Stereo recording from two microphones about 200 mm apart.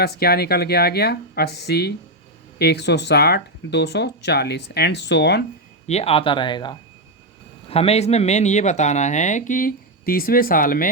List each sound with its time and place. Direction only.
0.0 s speech: 50° left (ahead or behind)
5.8 s speech: 30° left (ahead or behind)